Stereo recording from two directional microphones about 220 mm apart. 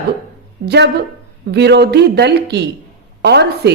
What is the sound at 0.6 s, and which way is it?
Speech, 50° right (ahead or behind).